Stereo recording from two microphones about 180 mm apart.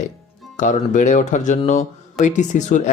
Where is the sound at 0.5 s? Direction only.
45° left (ahead or behind).